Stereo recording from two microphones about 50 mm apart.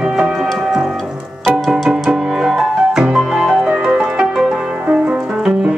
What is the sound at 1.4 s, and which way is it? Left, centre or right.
Music, centre.